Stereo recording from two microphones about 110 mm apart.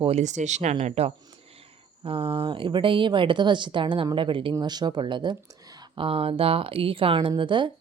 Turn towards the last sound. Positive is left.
turn(degrees=-45)  # may be behind; listen again after turning